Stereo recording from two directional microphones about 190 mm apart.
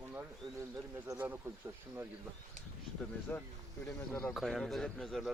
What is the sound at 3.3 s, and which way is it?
Speech, 10° left (ahead or behind).